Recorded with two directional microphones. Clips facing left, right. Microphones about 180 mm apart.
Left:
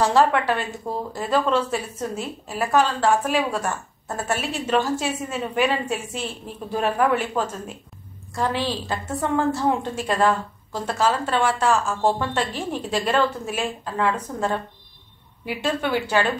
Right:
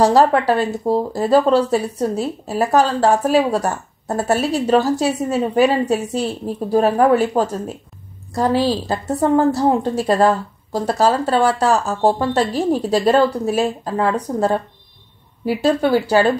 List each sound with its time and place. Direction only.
0.0 s speech: 35° right (ahead or behind)